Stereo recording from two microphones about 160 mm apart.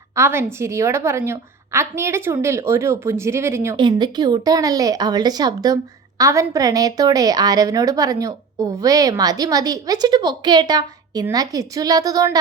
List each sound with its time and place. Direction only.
0.2 s a woman's voice: 15° right (ahead or behind)
3.8 s speech: 30° right (ahead or behind)